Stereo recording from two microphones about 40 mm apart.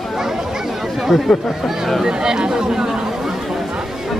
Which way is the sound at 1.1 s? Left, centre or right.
Centre.